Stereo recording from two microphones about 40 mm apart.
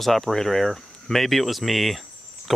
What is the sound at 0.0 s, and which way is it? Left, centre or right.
Speech, centre.